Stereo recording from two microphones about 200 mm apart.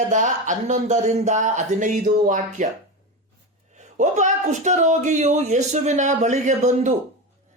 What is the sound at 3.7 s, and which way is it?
Speech, 35° right (ahead or behind).